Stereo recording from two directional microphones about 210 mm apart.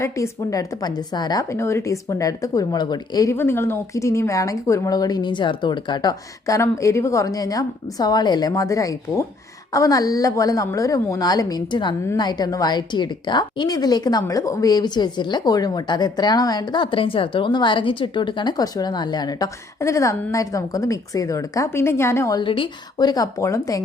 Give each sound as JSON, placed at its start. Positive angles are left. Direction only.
{"t": 0.0, "sound": "a woman's voice", "side_deg": 15}